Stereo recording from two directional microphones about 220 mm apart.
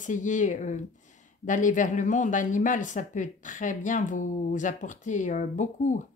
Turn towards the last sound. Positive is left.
turn(degrees=35)  # may be behind; listen again after turning